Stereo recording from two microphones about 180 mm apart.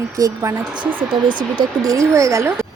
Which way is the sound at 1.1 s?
25° right (ahead or behind).